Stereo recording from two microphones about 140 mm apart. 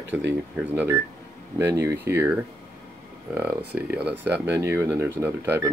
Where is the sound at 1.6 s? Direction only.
20° right (ahead or behind).